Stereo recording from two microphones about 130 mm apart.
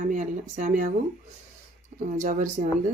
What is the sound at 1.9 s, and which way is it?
Speech, 80° right.